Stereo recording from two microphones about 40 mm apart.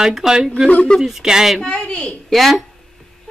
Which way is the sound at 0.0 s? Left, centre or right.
Centre.